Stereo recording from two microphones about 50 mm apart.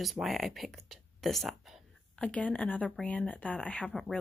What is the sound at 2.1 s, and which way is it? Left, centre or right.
A woman's voice, left.